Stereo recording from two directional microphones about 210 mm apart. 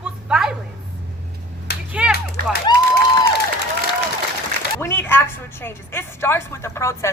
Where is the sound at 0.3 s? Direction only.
5° right (ahead or behind).